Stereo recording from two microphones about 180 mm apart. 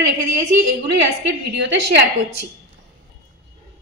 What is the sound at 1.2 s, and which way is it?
Speech, 70° right (ahead or behind).